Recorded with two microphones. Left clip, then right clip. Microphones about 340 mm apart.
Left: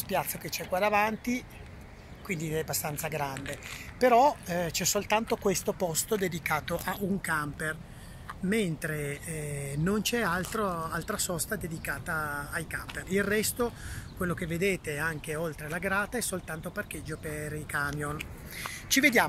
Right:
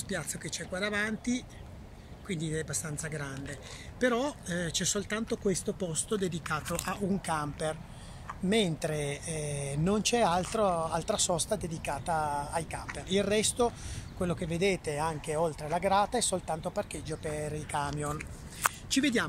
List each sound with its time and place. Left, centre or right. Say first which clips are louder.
0.1 s speech: left 6 dB; centre